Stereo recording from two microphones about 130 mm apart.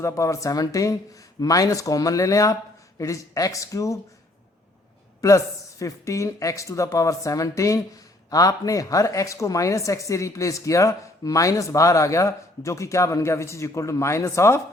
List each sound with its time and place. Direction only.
0.0 s speech: 25° left (ahead or behind)
5.2 s speech: 25° left (ahead or behind)